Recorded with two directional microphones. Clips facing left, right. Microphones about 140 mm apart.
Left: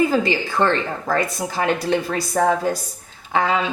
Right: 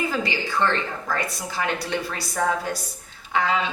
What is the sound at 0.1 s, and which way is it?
A woman's voice, 35° left (ahead or behind).